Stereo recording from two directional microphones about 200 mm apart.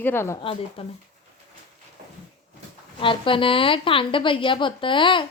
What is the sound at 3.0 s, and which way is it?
A woman's voice, 25° left (ahead or behind).